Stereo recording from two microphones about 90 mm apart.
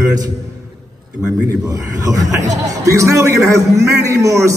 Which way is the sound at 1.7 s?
40° right (ahead or behind).